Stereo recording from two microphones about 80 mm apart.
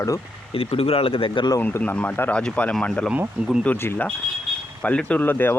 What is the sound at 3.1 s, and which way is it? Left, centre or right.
Speech, centre.